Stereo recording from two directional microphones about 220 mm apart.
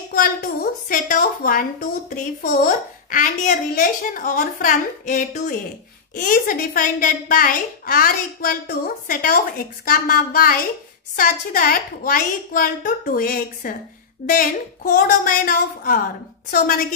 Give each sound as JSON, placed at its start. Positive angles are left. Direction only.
{"t": 0.1, "sound": "a woman's voice", "side_deg": 40}